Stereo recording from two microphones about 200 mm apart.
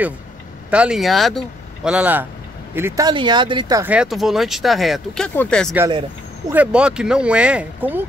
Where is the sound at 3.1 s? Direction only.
25° right (ahead or behind).